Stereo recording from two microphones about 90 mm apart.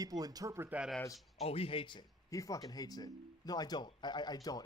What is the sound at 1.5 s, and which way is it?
Speech, 90° left.